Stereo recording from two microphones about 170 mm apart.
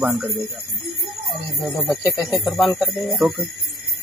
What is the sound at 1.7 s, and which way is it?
Speech, 20° left (ahead or behind).